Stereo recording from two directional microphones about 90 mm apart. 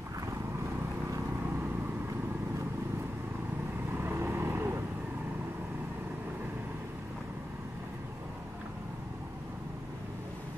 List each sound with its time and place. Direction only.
3.9 s vehicle: 25° right (ahead or behind)